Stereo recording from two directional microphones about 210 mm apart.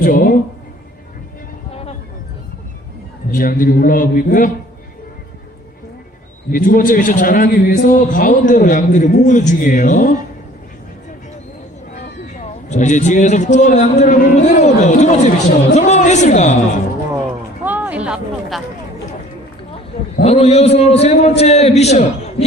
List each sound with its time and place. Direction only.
0.0 s speech: 45° left (ahead or behind)
1.7 s a sound: 30° left (ahead or behind)
3.3 s a man's voice: 40° left (ahead or behind)
6.5 s a man's voice: 40° left (ahead or behind)
12.3 s a man's voice: 35° left (ahead or behind)
17.6 s a sound: 10° right (ahead or behind)
20.2 s a man's voice: 30° left (ahead or behind)